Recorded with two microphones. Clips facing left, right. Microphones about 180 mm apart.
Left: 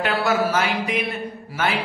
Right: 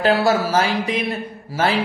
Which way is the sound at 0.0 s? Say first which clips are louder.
Right 4 dB; 35° right (ahead or behind).